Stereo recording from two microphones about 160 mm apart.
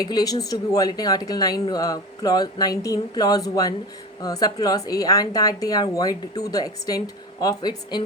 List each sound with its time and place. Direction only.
0.0 s speech: 25° left (ahead or behind)